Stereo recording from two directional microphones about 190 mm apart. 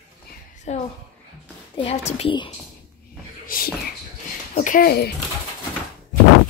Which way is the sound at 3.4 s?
50° left (ahead or behind).